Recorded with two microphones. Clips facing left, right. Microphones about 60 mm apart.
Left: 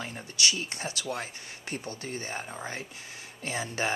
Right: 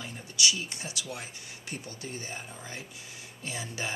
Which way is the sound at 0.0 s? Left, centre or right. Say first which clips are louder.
Left 1 dB; left.